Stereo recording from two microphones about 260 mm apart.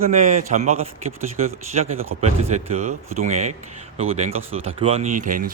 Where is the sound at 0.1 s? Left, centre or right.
Right.